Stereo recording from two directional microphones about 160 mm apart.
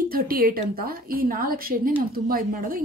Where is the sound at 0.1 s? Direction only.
65° right (ahead or behind).